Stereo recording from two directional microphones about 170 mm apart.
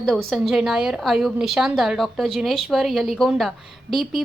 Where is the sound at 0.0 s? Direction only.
Centre (ahead or behind).